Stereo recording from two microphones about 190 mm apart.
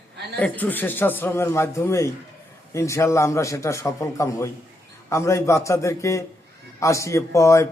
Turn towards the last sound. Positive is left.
turn(degrees=15)  # may be behind; listen again after turning